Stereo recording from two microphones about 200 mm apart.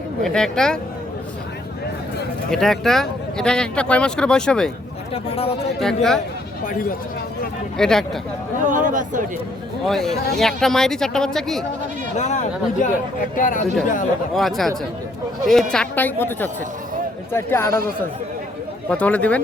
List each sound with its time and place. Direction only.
0.2 s speech: centre (ahead or behind)
2.5 s speech: centre (ahead or behind)
5.1 s speech: 30° left (ahead or behind)
5.8 s speech: centre (ahead or behind)
6.7 s speech: 45° left (ahead or behind)
7.8 s speech: centre (ahead or behind)
8.7 s speech: 40° right (ahead or behind)
9.8 s speech: centre (ahead or behind)
12.1 s speech: 35° left (ahead or behind)
14.3 s a woman's voice: centre (ahead or behind)
18.9 s a woman's voice: 5° left (ahead or behind)